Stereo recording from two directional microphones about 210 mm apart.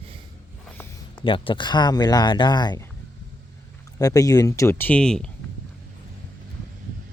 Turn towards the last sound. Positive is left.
turn(degrees=5)  # may be behind; listen again after turning